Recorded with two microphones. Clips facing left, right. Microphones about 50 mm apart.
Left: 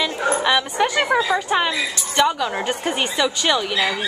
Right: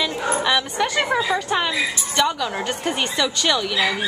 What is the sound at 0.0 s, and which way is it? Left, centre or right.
A woman's voice, centre.